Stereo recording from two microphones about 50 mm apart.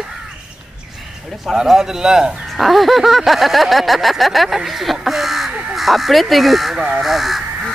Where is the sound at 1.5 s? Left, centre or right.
Centre.